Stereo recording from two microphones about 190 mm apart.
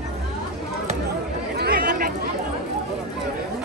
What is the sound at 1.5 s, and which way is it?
Chatter, 55° right (ahead or behind).